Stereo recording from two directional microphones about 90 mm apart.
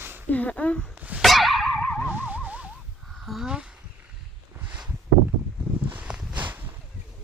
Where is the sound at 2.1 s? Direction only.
20° right (ahead or behind).